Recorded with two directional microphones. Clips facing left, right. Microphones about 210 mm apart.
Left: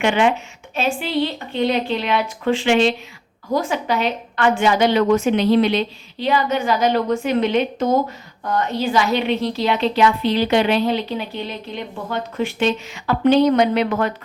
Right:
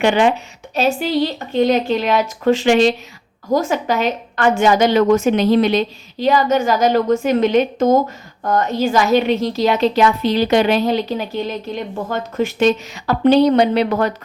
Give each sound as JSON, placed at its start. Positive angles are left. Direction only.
{"t": 0.0, "sound": "a woman's voice", "side_deg": -35}